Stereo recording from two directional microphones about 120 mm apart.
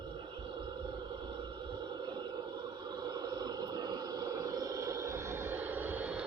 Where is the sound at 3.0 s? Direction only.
35° right (ahead or behind).